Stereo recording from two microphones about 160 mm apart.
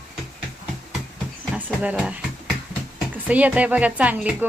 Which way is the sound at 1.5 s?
10° right (ahead or behind).